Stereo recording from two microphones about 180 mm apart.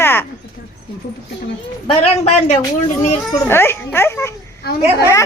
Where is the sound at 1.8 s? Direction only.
35° left (ahead or behind).